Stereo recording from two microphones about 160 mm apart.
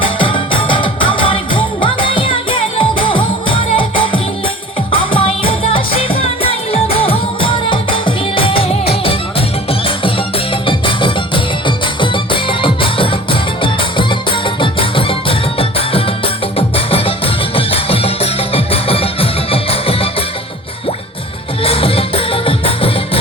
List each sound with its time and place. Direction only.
0.0 s music: 30° left (ahead or behind)
21.6 s music: 35° left (ahead or behind)